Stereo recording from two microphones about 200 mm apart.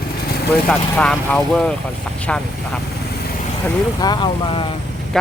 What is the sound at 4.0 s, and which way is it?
Speech, 20° left (ahead or behind).